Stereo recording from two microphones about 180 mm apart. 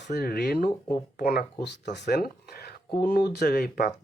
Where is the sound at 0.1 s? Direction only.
65° left (ahead or behind).